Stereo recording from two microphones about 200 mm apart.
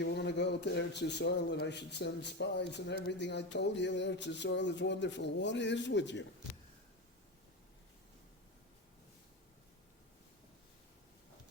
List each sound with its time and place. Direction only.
0.0 s a man's voice: 60° left (ahead or behind)